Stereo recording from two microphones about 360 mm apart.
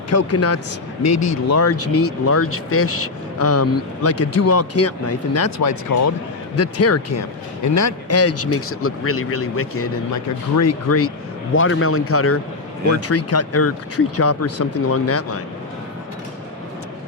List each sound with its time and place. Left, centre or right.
0.1 s speech: left